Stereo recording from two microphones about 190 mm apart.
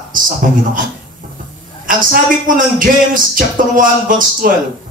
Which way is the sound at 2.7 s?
45° right (ahead or behind).